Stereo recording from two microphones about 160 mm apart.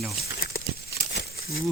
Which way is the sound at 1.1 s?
85° left.